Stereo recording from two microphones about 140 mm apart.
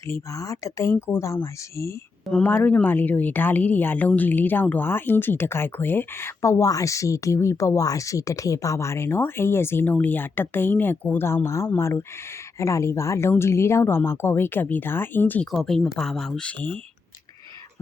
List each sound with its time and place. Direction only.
0.1 s speech: 20° left (ahead or behind)
2.2 s a woman's voice: 10° left (ahead or behind)